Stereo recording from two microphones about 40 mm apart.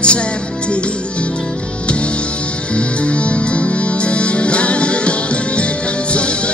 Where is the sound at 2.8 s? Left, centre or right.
Left.